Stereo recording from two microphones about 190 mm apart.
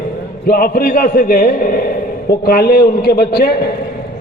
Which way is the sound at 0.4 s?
50° left (ahead or behind).